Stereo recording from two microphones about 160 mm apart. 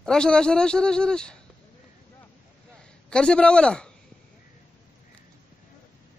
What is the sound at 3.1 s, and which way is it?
Speech, 5° left (ahead or behind).